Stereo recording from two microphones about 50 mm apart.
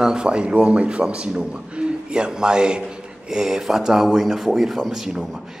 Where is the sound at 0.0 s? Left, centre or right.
Centre.